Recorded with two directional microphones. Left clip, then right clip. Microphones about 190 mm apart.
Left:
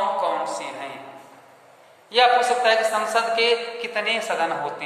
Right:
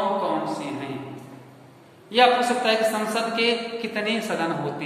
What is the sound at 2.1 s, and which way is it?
A man's voice, 20° left (ahead or behind).